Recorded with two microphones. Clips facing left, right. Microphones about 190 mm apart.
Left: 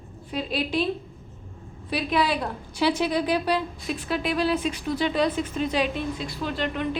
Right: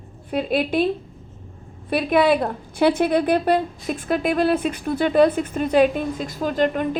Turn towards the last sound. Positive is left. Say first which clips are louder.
# right 7 dB
turn(degrees=-45)  # may be behind; listen again after turning